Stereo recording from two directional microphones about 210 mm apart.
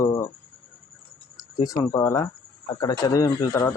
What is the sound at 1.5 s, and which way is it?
Speech, 20° left (ahead or behind).